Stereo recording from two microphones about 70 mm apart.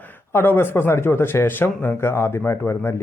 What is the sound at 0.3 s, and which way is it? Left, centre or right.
Speech, left.